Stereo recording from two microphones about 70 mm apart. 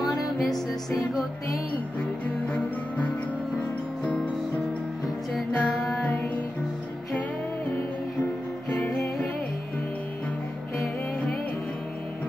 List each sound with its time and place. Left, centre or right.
0.0 s music: left
2.0 s music: centre
5.3 s music: centre
8.6 s music: left